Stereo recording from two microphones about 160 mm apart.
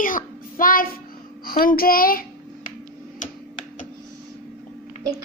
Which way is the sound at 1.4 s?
65° left (ahead or behind).